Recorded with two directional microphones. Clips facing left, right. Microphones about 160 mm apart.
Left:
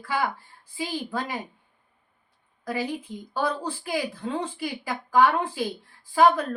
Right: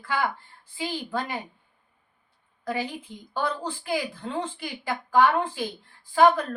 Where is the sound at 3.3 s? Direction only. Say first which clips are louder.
Left 1 dB; 10° left (ahead or behind).